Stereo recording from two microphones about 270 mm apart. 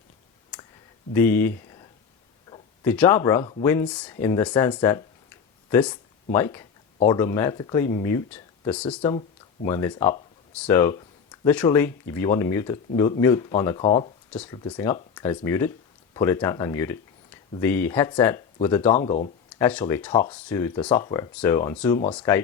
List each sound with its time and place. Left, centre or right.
1.1 s speech: centre
9.0 s speech: centre
14.3 s speech: centre
18.9 s speech: left
19.5 s speech: centre